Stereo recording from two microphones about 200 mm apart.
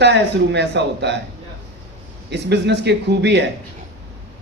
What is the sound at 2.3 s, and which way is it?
A man's voice, 60° right (ahead or behind).